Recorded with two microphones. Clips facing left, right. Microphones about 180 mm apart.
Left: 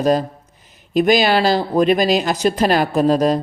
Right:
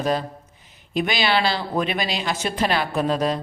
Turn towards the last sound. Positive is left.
turn(degrees=40)  # may be behind; listen again after turning